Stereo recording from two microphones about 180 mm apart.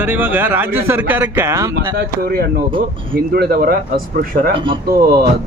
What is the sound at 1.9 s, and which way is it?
Speech, 60° right (ahead or behind).